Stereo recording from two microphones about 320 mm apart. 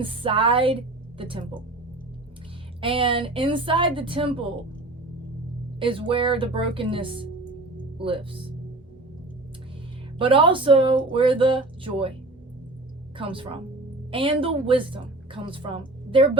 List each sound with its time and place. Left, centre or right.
0.0 s speech: centre
2.8 s speech: centre
5.8 s speech: centre
10.2 s speech: centre
13.1 s speech: centre